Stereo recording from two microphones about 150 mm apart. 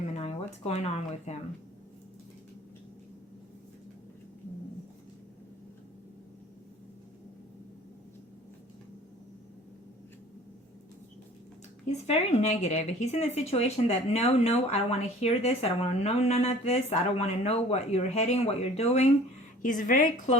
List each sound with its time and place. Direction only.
0.2 s speech: 45° left (ahead or behind)
11.9 s speech: 45° left (ahead or behind)
19.6 s a woman's voice: 60° left (ahead or behind)